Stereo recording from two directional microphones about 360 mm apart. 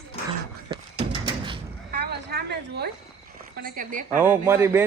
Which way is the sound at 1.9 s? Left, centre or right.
Right.